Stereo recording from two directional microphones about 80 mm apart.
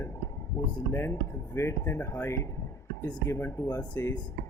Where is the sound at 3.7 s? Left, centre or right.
Left.